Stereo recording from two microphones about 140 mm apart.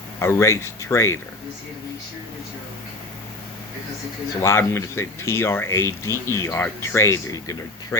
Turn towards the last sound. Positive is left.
turn(degrees=25)  # may be behind; listen again after turning